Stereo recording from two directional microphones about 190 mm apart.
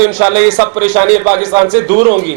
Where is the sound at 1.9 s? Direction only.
50° right (ahead or behind).